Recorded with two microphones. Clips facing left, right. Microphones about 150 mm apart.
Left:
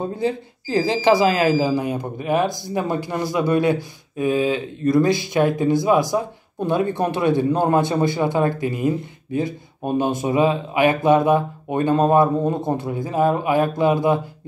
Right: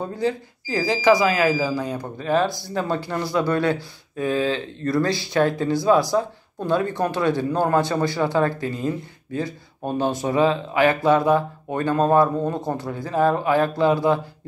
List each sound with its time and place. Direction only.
0.1 s a man's voice: 25° left (ahead or behind)